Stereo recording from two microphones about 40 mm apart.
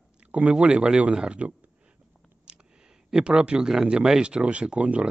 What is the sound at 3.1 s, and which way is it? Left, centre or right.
Speech, centre.